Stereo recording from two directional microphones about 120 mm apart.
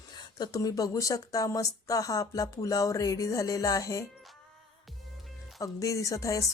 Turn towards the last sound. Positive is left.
turn(degrees=25)  # may be behind; listen again after turning